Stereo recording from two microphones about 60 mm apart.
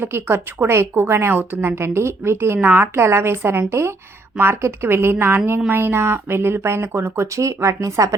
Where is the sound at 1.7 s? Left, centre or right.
Right.